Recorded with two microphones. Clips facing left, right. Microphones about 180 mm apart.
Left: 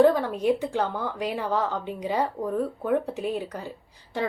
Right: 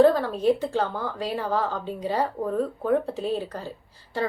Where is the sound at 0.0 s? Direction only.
15° left (ahead or behind).